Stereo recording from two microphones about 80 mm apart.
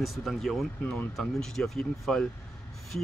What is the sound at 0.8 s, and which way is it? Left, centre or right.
Speech, centre.